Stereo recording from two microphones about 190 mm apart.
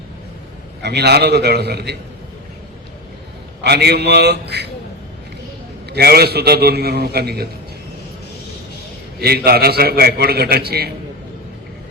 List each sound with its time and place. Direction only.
0.8 s a man's voice: 60° right (ahead or behind)
3.6 s a man's voice: 60° right (ahead or behind)
5.9 s a man's voice: 55° right (ahead or behind)
9.2 s a man's voice: 55° right (ahead or behind)